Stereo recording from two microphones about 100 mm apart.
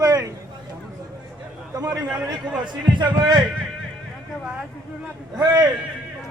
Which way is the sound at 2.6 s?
50° right (ahead or behind).